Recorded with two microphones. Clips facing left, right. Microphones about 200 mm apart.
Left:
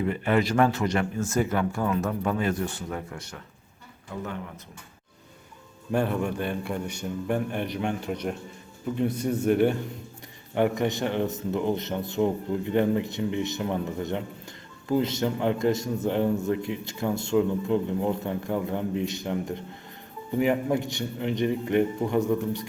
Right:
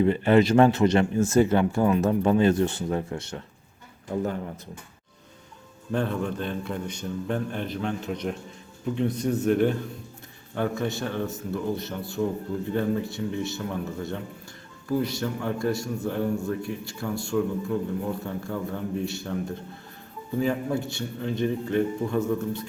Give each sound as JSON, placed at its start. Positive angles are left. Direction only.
{"t": 0.0, "sound": "a man's voice", "side_deg": -30}
{"t": 5.9, "sound": "a man's voice", "side_deg": 10}